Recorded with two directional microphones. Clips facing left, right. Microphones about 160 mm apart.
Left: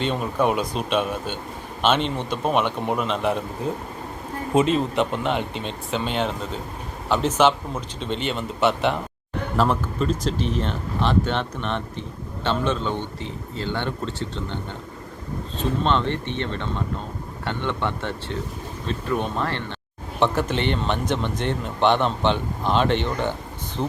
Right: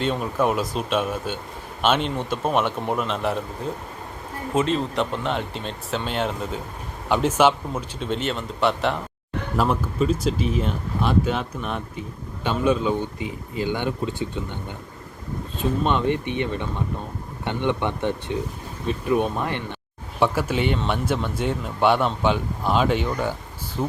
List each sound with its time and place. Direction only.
0.0 s speech: centre (ahead or behind)
4.5 s speech: 10° left (ahead or behind); by 23.3 s 5° right (ahead or behind)